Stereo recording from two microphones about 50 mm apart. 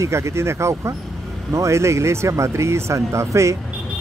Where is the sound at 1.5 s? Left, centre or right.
Right.